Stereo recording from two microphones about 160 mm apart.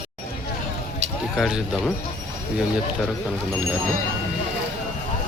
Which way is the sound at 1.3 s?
Centre (ahead or behind).